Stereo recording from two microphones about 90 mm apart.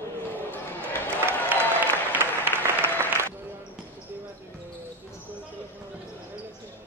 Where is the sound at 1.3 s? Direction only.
25° left (ahead or behind).